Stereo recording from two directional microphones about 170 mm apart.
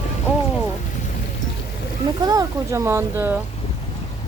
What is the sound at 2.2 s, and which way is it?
Speech, 20° right (ahead or behind).